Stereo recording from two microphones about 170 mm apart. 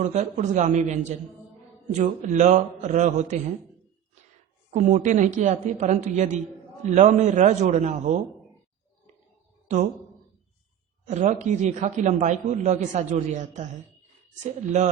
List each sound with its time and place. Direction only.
0.0 s a man's voice: 45° right (ahead or behind)
4.7 s a man's voice: 45° right (ahead or behind)
11.1 s a man's voice: 45° right (ahead or behind)